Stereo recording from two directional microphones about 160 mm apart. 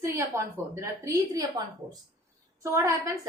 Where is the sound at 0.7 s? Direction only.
20° right (ahead or behind).